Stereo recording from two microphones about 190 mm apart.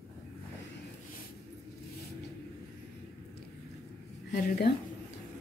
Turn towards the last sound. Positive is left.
turn(degrees=55)  # may be behind; listen again after turning